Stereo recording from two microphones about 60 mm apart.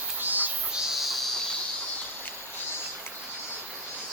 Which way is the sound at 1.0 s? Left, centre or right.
Centre.